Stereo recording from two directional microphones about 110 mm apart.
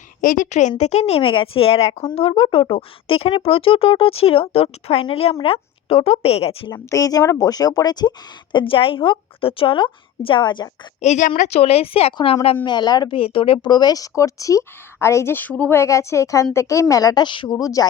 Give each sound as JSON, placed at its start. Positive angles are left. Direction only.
{"t": 0.8, "sound": "speech", "side_deg": 85}
{"t": 2.1, "sound": "speech", "side_deg": 60}
{"t": 6.7, "sound": "speech", "side_deg": 30}
{"t": 8.5, "sound": "a woman's voice", "side_deg": 55}
{"t": 11.0, "sound": "speech", "side_deg": 80}
{"t": 12.6, "sound": "speech", "side_deg": 40}
{"t": 13.1, "sound": "speech", "side_deg": 55}
{"t": 15.8, "sound": "speech", "side_deg": 25}
{"t": 17.6, "sound": "speech", "side_deg": 30}